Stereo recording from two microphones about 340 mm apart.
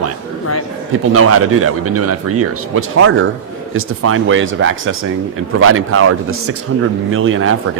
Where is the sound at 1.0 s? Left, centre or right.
Right.